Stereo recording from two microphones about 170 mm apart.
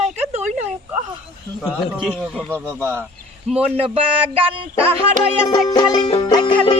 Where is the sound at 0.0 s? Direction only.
40° right (ahead or behind).